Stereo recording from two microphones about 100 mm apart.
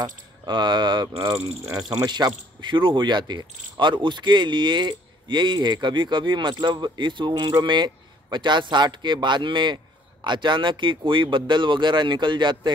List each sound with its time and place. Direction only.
0.5 s speech: 50° right (ahead or behind)